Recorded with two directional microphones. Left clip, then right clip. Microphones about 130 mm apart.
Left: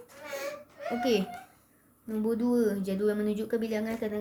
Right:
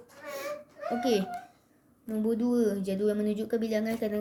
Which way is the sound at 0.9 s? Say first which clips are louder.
Even; centre (ahead or behind).